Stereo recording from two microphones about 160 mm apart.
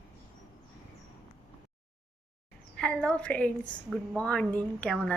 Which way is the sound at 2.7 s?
5° left (ahead or behind).